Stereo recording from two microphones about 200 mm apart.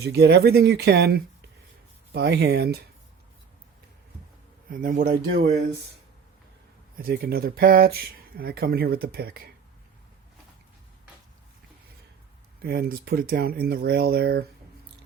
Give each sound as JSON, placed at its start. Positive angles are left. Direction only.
{"t": 0.0, "sound": "speech", "side_deg": -55}
{"t": 4.7, "sound": "speech", "side_deg": -45}
{"t": 6.9, "sound": "speech", "side_deg": -45}
{"t": 12.6, "sound": "speech", "side_deg": -50}